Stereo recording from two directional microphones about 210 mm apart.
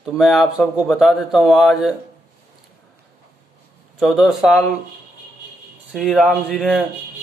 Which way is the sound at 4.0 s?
Centre (ahead or behind).